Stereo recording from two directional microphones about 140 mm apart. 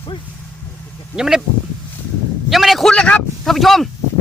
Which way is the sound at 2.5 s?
Centre (ahead or behind).